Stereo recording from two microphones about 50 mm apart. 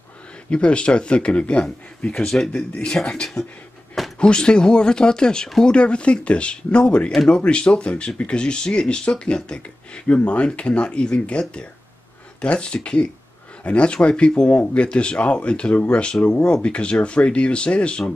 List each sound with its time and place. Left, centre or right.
0.5 s speech: left